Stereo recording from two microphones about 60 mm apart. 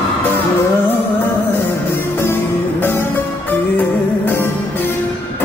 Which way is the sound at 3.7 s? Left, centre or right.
Left.